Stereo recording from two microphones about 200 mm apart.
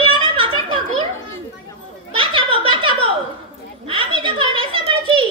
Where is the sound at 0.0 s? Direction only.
90° left.